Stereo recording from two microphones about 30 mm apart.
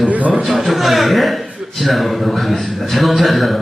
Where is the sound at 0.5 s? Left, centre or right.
Centre.